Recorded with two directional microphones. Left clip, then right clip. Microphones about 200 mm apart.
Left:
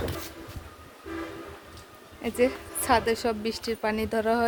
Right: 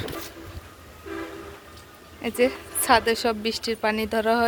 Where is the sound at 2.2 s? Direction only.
Centre (ahead or behind).